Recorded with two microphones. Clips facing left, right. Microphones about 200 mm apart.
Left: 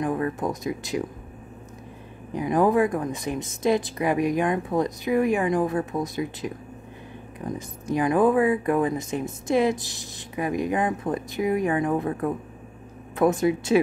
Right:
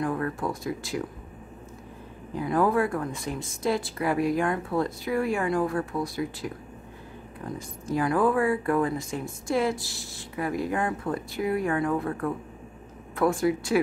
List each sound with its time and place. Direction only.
0.0 s speech: 20° left (ahead or behind)
2.3 s speech: 20° left (ahead or behind)